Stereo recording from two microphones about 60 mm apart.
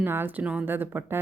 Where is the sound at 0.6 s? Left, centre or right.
Right.